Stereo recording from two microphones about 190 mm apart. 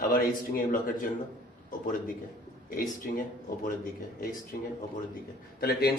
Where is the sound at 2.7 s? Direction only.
45° left (ahead or behind).